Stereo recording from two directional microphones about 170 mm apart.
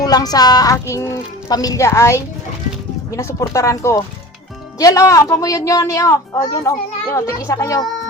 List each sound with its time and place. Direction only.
0.0 s a woman's voice: 20° left (ahead or behind)